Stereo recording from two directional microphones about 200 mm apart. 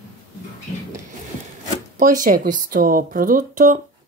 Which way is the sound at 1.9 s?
40° right (ahead or behind).